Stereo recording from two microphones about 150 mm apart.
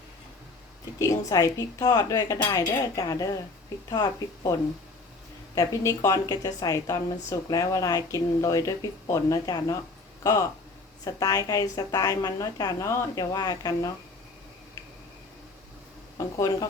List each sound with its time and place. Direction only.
0.9 s a woman's voice: 20° left (ahead or behind)
5.5 s a woman's voice: 25° left (ahead or behind)
11.0 s a woman's voice: 25° left (ahead or behind)
16.1 s a woman's voice: 25° left (ahead or behind)